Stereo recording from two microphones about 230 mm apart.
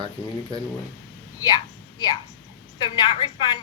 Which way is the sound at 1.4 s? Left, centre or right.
Centre.